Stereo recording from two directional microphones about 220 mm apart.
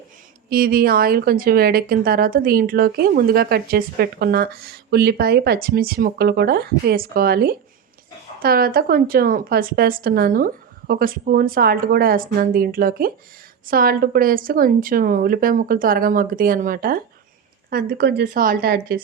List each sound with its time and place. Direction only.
0.5 s a woman's voice: 40° right (ahead or behind)